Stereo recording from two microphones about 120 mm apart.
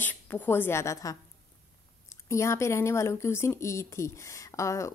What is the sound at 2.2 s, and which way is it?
A woman's voice, 25° left (ahead or behind).